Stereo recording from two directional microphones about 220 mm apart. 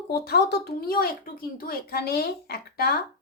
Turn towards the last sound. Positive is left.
turn(degrees=45)  # may be behind; listen again after turning